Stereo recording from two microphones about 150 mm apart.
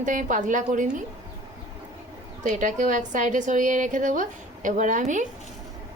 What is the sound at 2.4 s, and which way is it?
A woman's voice, 55° right (ahead or behind).